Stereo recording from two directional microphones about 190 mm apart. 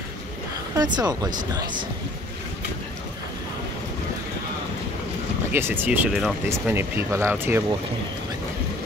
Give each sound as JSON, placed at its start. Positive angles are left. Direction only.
{"t": 0.7, "sound": "speech", "side_deg": -20}
{"t": 5.5, "sound": "speech", "side_deg": -10}